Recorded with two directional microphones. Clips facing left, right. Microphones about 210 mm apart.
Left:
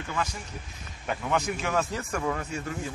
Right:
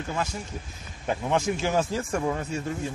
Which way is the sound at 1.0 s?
30° right (ahead or behind).